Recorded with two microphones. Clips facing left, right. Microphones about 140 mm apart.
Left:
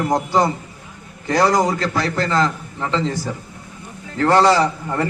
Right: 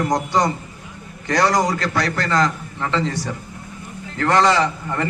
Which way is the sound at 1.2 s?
25° left (ahead or behind).